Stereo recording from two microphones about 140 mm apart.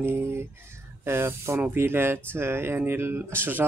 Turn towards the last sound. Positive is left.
turn(degrees=-15)  # may be behind; listen again after turning